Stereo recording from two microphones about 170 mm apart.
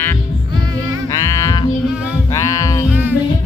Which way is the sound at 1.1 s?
20° left (ahead or behind).